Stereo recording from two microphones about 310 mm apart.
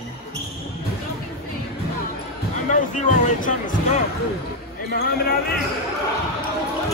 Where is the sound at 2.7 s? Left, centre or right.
Left.